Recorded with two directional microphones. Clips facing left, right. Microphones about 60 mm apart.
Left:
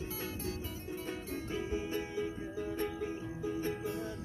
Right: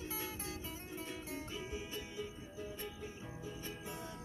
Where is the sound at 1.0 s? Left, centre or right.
Left.